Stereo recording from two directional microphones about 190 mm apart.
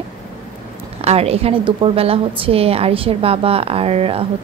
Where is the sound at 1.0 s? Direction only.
30° right (ahead or behind).